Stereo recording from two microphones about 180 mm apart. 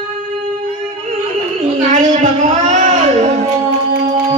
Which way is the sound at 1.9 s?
40° right (ahead or behind).